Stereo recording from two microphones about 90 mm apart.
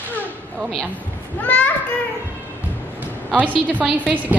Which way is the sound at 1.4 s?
20° left (ahead or behind).